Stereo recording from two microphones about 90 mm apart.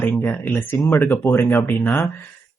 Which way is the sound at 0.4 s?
25° left (ahead or behind).